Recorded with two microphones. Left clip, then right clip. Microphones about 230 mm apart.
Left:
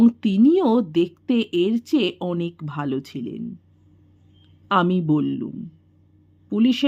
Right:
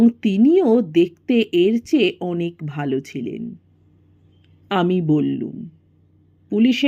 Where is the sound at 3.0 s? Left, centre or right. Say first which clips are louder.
Right 3 dB; centre.